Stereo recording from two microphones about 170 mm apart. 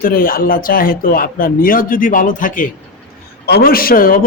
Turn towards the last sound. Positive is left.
turn(degrees=55)  # may be behind; listen again after turning